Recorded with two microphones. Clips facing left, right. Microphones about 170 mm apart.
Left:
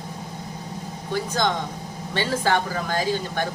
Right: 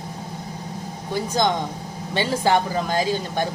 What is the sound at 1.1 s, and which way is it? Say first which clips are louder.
Speech: right 2 dB; 15° right (ahead or behind).